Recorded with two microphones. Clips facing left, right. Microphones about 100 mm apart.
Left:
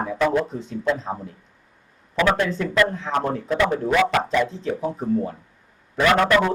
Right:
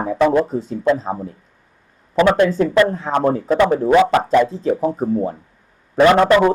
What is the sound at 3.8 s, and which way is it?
Speech, 30° right (ahead or behind).